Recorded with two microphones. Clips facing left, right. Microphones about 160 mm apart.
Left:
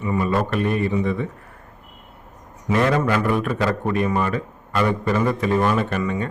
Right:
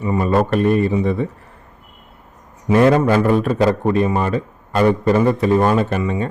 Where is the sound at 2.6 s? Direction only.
35° right (ahead or behind).